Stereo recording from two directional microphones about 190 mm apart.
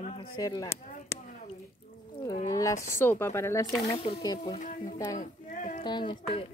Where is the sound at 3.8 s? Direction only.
30° left (ahead or behind).